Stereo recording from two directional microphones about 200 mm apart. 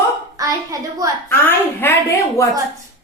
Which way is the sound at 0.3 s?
15° right (ahead or behind).